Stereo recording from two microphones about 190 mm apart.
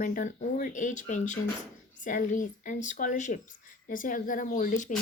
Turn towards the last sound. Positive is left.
turn(degrees=45)  # may be behind; listen again after turning